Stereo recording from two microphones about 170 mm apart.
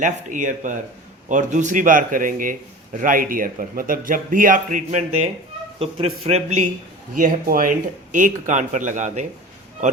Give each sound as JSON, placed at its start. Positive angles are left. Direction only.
{"t": 0.0, "sound": "a man's voice", "side_deg": -50}
{"t": 7.2, "sound": "a man's voice", "side_deg": -50}